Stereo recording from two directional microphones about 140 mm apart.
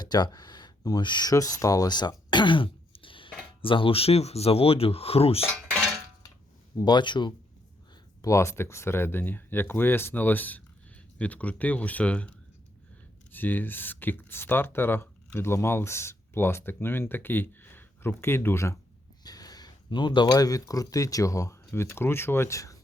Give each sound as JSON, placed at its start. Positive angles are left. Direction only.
{"t": 0.0, "sound": "speech", "side_deg": 30}
{"t": 6.7, "sound": "speech", "side_deg": 30}
{"t": 8.2, "sound": "speech", "side_deg": 20}
{"t": 13.3, "sound": "speech", "side_deg": 15}